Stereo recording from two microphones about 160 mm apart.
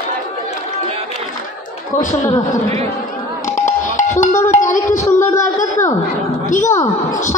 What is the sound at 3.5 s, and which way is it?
Music, 50° left (ahead or behind).